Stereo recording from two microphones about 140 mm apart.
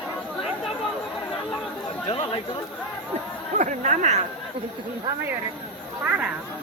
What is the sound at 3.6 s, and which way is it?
Speech, 55° right (ahead or behind).